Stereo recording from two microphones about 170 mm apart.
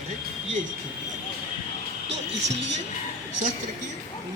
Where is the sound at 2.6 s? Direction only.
90° right.